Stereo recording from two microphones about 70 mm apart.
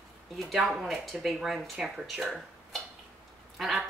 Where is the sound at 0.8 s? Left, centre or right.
Centre.